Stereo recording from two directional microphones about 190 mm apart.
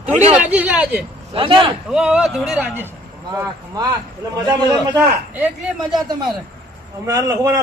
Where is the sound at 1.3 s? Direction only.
25° right (ahead or behind).